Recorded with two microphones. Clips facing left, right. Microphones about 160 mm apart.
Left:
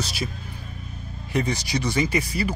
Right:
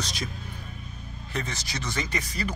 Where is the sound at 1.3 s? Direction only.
15° left (ahead or behind).